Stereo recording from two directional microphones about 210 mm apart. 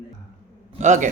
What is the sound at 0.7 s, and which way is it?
Speech, 35° right (ahead or behind).